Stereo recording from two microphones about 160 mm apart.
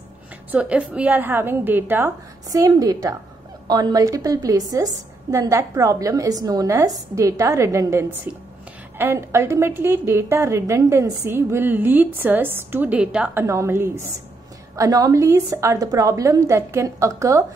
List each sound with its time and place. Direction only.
0.5 s a woman's voice: 10° right (ahead or behind)